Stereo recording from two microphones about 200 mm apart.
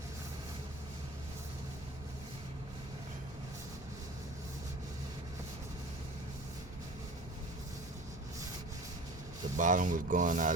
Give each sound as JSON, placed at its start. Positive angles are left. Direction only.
{"t": 9.6, "sound": "speech", "side_deg": -40}